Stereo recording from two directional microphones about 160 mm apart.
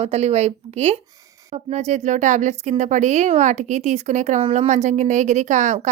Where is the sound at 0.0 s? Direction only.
40° right (ahead or behind).